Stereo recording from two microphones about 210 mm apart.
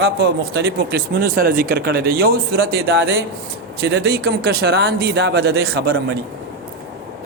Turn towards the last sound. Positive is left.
turn(degrees=-50)  # may be behind; listen again after turning